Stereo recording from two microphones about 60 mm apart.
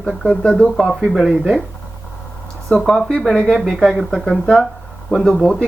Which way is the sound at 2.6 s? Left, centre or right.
Centre.